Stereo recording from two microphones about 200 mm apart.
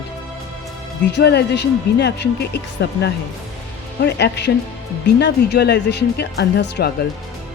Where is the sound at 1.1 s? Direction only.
60° left (ahead or behind).